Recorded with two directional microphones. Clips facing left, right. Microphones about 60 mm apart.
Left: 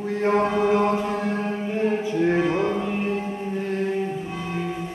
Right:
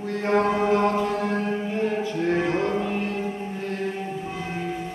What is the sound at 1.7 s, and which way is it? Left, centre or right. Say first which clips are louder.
Music: left 2 dB; centre.